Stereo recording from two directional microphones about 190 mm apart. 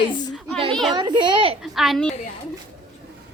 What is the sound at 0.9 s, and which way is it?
Speech, 25° right (ahead or behind).